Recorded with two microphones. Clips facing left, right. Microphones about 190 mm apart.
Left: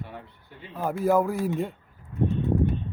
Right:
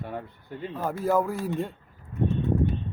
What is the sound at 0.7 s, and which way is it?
Speech, 15° left (ahead or behind).